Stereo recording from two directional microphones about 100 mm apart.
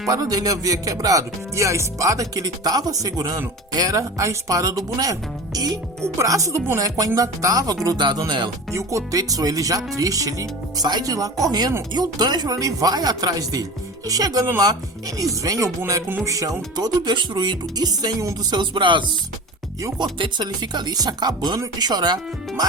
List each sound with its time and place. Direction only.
0.1 s speech: 40° right (ahead or behind)
7.9 s speech: 50° right (ahead or behind)
8.7 s speech: 30° right (ahead or behind)
18.5 s speech: 50° right (ahead or behind)